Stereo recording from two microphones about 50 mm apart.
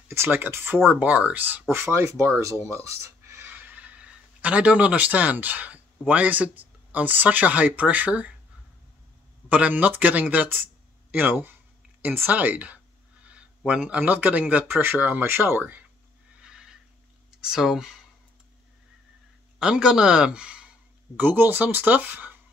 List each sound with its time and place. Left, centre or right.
0.1 s speech: right
0.8 s speech: right
2.1 s speech: right
3.5 s speech: right
9.5 s speech: right
12.3 s a sound: right
13.7 s speech: right
14.8 s speech: right
16.3 s neigh: centre
17.3 s speech: centre
19.6 s a man's voice: centre
21.2 s speech: right